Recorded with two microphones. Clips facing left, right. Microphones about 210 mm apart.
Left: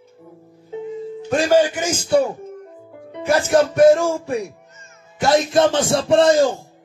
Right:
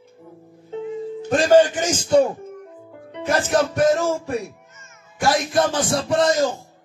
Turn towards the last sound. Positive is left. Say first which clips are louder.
# left 5 dB
turn(degrees=30)  # may be behind; listen again after turning